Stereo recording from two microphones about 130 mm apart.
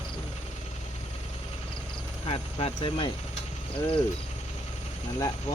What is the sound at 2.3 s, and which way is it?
Speech, 45° left (ahead or behind).